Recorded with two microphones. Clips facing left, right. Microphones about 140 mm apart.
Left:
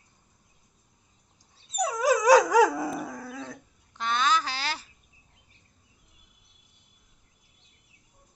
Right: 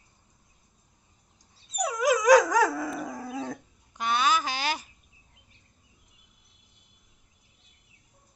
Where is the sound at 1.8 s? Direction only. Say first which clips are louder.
Even; 35° left (ahead or behind).